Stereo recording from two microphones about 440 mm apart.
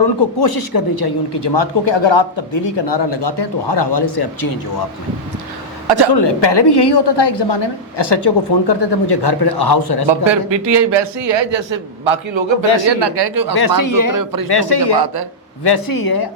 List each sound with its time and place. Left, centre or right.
0.3 s speech: left
6.1 s speech: left
10.1 s a man's voice: right
12.8 s speech: right
13.8 s speech: left
14.1 s speech: right
14.5 s speech: left
14.9 s speech: right
15.6 s speech: left